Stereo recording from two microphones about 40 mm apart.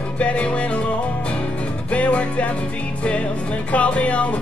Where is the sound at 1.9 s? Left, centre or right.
Left.